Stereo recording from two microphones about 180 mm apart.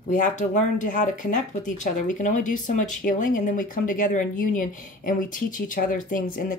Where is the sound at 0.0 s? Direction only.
45° left (ahead or behind).